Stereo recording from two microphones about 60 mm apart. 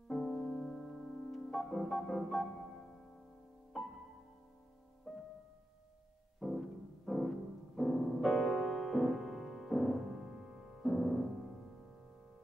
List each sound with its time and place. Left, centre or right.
0.1 s piano: centre
5.1 s music: centre
6.4 s music: centre